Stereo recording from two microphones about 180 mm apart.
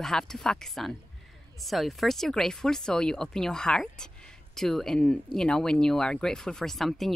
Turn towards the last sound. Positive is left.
turn(degrees=0)  # may be behind; listen again after turning